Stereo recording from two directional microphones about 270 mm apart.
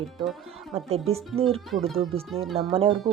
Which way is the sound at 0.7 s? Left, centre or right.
Right.